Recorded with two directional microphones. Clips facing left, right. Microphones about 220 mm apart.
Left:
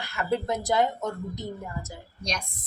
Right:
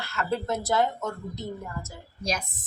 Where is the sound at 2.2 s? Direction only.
5° right (ahead or behind).